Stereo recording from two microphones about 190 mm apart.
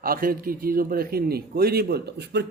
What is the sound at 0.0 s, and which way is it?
A man's voice, 50° right (ahead or behind).